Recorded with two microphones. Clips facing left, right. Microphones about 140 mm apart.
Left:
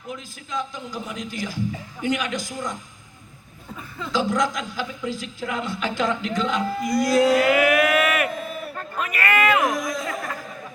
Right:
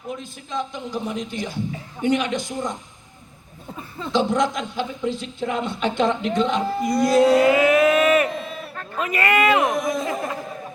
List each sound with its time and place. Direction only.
0.1 s a woman's voice: 25° right (ahead or behind)
4.0 s a woman's voice: 25° right (ahead or behind)
8.6 s a sound: 5° left (ahead or behind)
9.0 s speech: 25° right (ahead or behind)